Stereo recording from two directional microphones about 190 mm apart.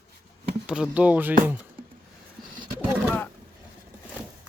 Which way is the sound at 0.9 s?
5° right (ahead or behind).